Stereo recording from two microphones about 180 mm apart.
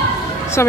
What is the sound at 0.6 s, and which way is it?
Music, 15° left (ahead or behind).